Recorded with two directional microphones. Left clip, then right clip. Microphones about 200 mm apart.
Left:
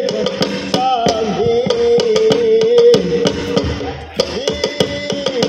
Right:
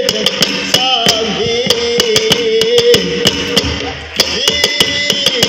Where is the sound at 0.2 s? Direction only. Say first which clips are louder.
Right 4 dB; 55° left (ahead or behind).